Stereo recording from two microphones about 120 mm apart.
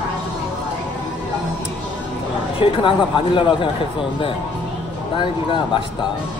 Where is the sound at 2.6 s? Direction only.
45° left (ahead or behind).